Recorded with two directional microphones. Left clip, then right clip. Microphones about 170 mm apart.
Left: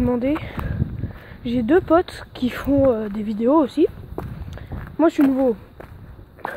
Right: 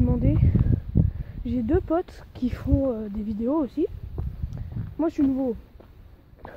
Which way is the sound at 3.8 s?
30° right (ahead or behind).